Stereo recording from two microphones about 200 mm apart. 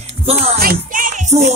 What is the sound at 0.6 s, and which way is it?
Music, 45° right (ahead or behind).